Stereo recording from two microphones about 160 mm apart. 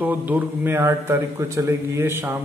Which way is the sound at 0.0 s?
10° right (ahead or behind).